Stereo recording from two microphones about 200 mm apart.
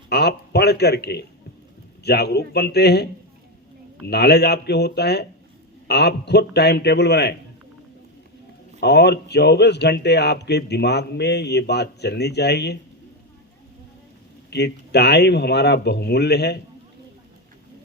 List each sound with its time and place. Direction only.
0.1 s speech: 55° left (ahead or behind)
8.8 s speech: 55° left (ahead or behind)
14.5 s speech: 55° left (ahead or behind)